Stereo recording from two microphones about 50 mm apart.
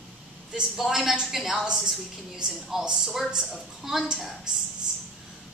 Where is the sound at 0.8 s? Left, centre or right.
Centre.